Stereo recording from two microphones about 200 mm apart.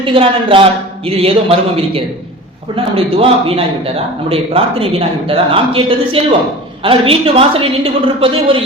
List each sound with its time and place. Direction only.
0.0 s a man's voice: 25° right (ahead or behind)